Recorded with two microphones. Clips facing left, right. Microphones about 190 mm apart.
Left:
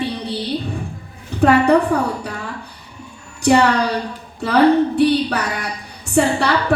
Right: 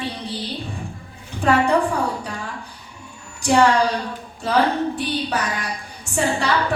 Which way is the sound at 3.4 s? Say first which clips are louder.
Left 2 dB; 60° left (ahead or behind).